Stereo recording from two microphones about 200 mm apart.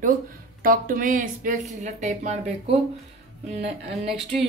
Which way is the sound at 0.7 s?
45° right (ahead or behind).